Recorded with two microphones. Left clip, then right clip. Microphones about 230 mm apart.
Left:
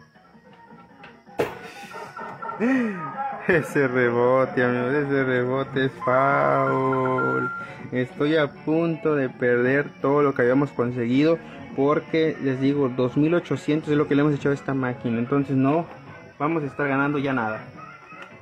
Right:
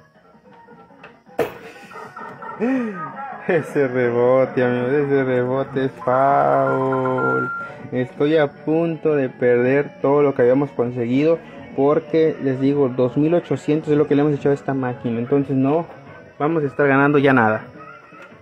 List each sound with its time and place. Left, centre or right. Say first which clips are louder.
2.6 s a man's voice: right 2 dB; centre
16.3 s a man's voice: right 6 dB; centre